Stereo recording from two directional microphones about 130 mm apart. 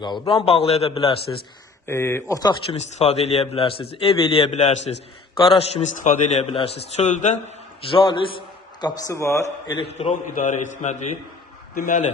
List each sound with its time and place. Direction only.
0.0 s a man's voice: 40° left (ahead or behind)
1.9 s a man's voice: 20° left (ahead or behind)
2.3 s speech: 30° left (ahead or behind)
2.6 s a man's voice: 55° left (ahead or behind)
5.4 s a man's voice: 50° left (ahead or behind)
6.0 s a man's voice: 75° left (ahead or behind)
6.4 s a man's voice: 50° left (ahead or behind); by 7.3 s 65° left (ahead or behind)
7.8 s a man's voice: 40° left (ahead or behind)
9.0 s a man's voice: 20° left (ahead or behind)
9.7 s a man's voice: 45° left (ahead or behind)
10.2 s a man's voice: 75° left (ahead or behind)
11.7 s a man's voice: 90° left